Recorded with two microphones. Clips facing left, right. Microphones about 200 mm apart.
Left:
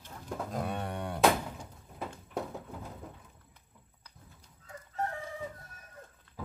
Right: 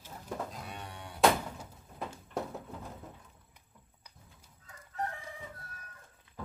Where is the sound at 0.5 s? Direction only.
55° left (ahead or behind).